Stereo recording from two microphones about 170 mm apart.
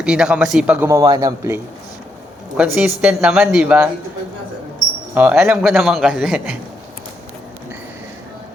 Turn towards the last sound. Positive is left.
turn(degrees=-5)  # may be behind; listen again after turning